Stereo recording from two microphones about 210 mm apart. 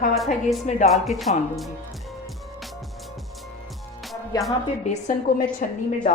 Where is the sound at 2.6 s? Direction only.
Centre (ahead or behind).